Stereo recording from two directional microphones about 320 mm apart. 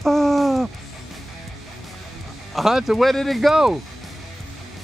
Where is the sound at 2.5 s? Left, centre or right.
Centre.